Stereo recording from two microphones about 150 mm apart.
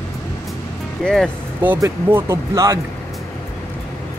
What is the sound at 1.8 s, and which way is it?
Speech, 20° right (ahead or behind).